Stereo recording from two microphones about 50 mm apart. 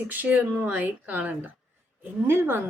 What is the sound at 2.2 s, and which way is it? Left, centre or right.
Speech, right.